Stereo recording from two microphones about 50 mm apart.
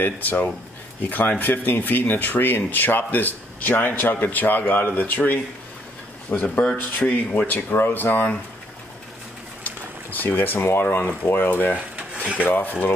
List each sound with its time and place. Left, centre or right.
0.0 s speech: left
9.6 s boiling: left
10.7 s speech: left
12.0 s dishes: right
12.4 s speech: left